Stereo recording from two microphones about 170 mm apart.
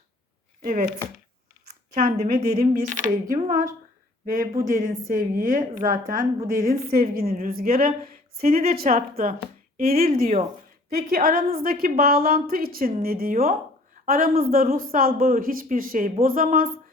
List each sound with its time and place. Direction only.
0.6 s speech: 55° right (ahead or behind)
4.6 s a woman's voice: 55° right (ahead or behind)
9.7 s a woman's voice: 60° right (ahead or behind)